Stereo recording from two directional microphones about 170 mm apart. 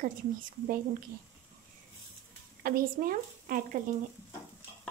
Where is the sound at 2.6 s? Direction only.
60° right (ahead or behind).